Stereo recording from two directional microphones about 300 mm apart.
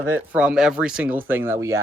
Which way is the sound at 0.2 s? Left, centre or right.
Centre.